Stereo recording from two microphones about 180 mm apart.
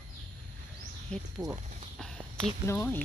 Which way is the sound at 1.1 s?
5° left (ahead or behind).